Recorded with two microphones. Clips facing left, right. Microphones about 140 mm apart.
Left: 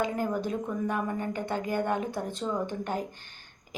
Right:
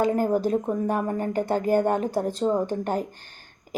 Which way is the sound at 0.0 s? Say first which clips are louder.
Right 7 dB; 40° right (ahead or behind).